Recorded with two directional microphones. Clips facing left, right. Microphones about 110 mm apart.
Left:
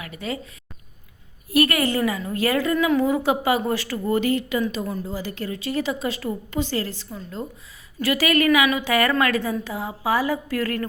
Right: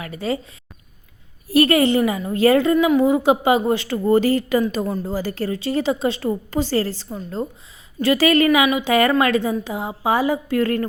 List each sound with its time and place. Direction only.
0.0 s a woman's voice: 35° right (ahead or behind)
1.5 s a woman's voice: 30° right (ahead or behind)